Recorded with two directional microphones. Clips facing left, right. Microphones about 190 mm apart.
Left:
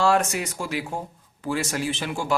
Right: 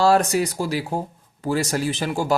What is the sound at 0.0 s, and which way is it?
Speech, 35° right (ahead or behind).